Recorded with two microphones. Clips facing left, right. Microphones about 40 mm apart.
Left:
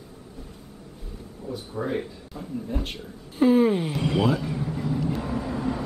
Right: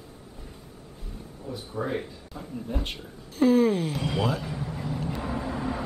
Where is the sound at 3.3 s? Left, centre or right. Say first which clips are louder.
Left 2 dB; centre.